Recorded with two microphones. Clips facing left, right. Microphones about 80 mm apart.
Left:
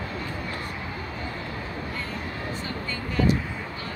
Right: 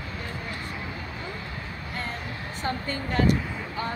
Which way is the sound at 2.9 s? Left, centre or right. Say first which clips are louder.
Even; right.